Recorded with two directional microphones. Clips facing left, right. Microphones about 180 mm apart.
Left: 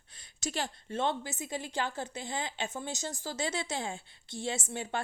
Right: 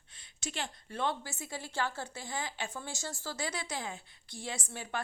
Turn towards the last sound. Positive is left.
turn(degrees=25)  # may be behind; listen again after turning